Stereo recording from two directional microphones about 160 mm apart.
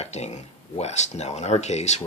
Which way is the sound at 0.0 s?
45° left (ahead or behind).